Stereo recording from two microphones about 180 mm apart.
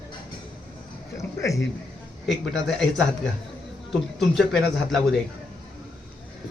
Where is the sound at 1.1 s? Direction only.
15° left (ahead or behind).